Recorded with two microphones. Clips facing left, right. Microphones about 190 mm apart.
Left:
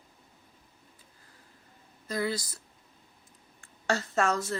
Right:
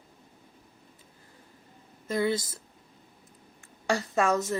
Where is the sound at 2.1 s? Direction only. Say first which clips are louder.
Right 4 dB; 25° right (ahead or behind).